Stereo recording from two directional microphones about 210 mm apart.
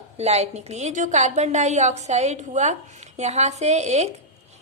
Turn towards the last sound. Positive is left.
turn(degrees=-30)  # may be behind; listen again after turning